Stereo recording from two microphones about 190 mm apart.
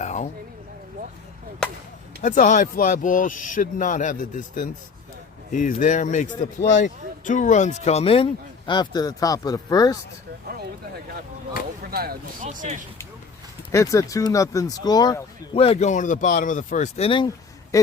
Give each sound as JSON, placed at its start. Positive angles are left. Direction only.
{"t": 0.0, "sound": "a sound", "side_deg": 40}
{"t": 2.2, "sound": "speech", "side_deg": 40}
{"t": 11.9, "sound": "speech", "side_deg": -50}
{"t": 12.5, "sound": "speech", "side_deg": -40}
{"t": 13.7, "sound": "speech", "side_deg": 15}